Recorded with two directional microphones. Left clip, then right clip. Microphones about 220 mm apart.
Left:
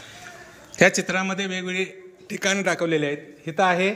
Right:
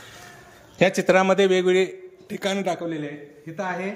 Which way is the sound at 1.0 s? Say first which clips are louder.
Right 8 dB; 25° right (ahead or behind).